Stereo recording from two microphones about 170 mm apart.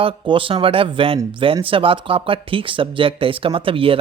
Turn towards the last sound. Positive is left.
turn(degrees=-30)  # may be behind; listen again after turning